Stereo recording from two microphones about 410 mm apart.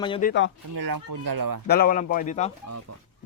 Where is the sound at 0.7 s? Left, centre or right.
Right.